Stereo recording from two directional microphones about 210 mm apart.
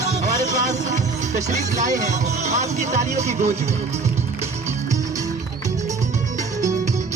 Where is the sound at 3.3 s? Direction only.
35° right (ahead or behind).